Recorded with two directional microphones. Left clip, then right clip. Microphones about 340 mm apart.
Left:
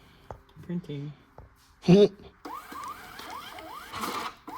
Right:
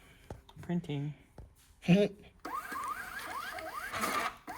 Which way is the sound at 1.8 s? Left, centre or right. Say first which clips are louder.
Left 10 dB; centre.